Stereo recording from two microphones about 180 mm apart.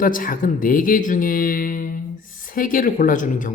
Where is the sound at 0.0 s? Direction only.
50° left (ahead or behind).